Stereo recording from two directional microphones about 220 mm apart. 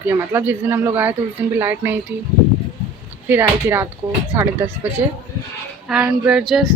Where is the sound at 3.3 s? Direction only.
10° right (ahead or behind).